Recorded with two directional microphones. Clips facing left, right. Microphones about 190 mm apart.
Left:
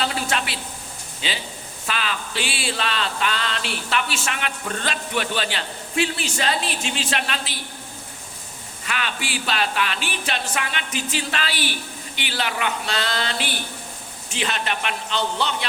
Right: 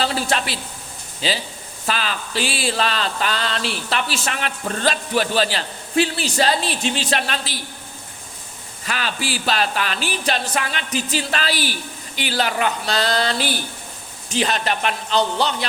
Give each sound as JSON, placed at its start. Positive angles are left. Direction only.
{"t": 0.0, "sound": "a sound", "side_deg": -35}
{"t": 1.2, "sound": "speech", "side_deg": -35}
{"t": 8.8, "sound": "speech", "side_deg": -35}